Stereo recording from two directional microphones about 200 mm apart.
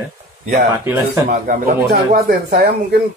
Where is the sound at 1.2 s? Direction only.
45° right (ahead or behind).